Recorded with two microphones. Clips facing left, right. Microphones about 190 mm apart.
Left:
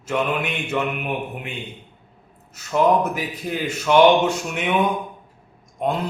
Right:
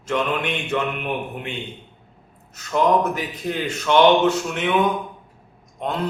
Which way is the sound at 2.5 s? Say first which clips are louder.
Left 1 dB; 10° left (ahead or behind).